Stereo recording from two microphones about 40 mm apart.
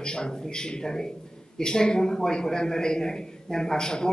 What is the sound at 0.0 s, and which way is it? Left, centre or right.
A man's voice, centre.